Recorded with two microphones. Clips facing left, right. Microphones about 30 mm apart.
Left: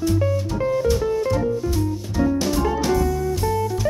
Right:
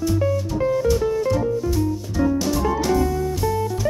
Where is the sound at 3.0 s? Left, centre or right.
Centre.